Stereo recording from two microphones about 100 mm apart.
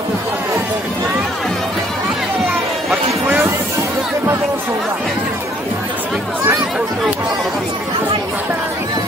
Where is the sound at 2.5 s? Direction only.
15° right (ahead or behind).